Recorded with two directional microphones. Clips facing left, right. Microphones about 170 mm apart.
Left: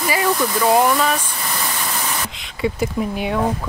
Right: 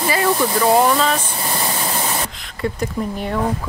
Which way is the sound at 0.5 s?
10° left (ahead or behind).